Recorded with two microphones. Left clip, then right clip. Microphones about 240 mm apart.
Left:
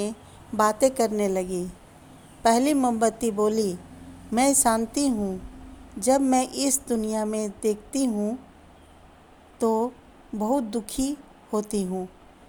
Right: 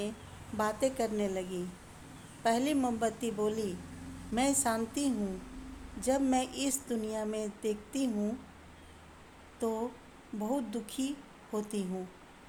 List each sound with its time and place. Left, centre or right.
0.5 s a woman's voice: left
9.6 s a woman's voice: left